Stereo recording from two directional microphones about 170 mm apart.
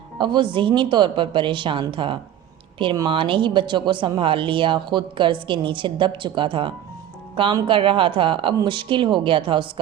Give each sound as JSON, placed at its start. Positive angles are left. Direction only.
{"t": 0.2, "sound": "speech", "side_deg": -30}